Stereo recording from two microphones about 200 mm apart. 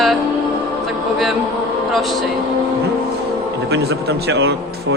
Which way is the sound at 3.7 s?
55° right (ahead or behind).